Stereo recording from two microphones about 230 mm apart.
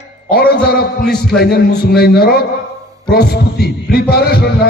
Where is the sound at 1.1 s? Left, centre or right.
Left.